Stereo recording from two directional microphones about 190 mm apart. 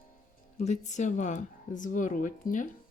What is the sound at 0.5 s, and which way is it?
Speech, 35° left (ahead or behind).